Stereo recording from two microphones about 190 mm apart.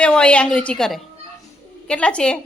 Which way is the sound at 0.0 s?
5° left (ahead or behind).